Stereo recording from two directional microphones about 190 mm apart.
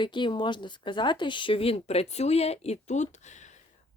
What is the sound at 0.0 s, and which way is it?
Speech, 25° left (ahead or behind).